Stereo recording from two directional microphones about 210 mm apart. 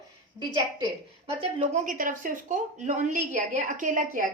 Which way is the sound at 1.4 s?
35° right (ahead or behind).